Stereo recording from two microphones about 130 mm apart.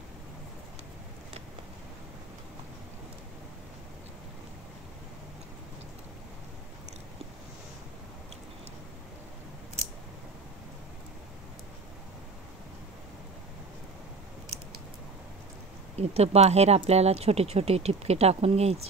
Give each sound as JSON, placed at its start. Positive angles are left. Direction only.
{"t": 16.0, "sound": "speech", "side_deg": -55}